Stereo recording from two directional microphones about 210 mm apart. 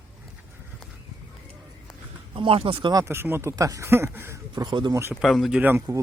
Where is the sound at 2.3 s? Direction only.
25° right (ahead or behind).